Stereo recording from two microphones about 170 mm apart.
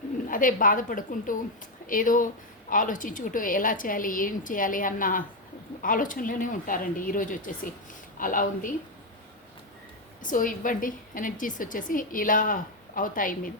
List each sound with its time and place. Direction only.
0.3 s a woman's voice: 55° left (ahead or behind)
10.2 s a woman's voice: 55° left (ahead or behind)